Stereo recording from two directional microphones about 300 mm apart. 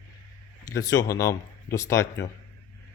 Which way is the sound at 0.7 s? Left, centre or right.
Centre.